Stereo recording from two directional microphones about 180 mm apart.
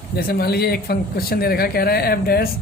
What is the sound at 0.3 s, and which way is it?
Speech, 60° left (ahead or behind).